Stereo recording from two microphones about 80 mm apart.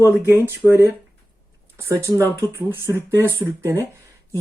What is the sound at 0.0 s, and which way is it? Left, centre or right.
Speech, right.